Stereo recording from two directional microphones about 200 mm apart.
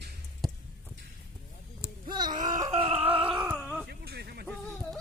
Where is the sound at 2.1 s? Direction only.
20° right (ahead or behind).